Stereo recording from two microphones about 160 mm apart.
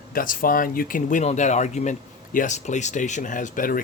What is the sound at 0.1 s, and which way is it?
Speech, 60° left (ahead or behind).